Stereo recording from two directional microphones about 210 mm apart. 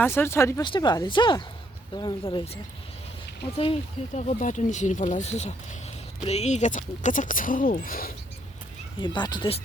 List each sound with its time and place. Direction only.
0.0 s speech: 10° left (ahead or behind); by 2.6 s 25° left (ahead or behind)
3.6 s speech: 30° left (ahead or behind)
9.0 s speech: 20° left (ahead or behind)